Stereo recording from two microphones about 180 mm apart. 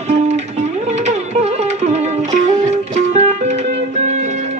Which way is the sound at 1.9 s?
40° right (ahead or behind).